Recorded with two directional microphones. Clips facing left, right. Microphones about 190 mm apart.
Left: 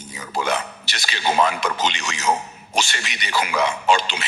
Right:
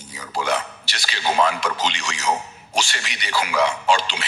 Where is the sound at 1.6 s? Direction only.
20° left (ahead or behind).